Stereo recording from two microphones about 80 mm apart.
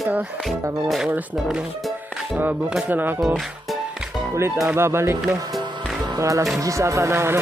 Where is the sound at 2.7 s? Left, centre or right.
Right.